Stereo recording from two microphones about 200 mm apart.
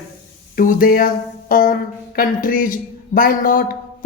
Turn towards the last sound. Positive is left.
turn(degrees=45)  # may be behind; listen again after turning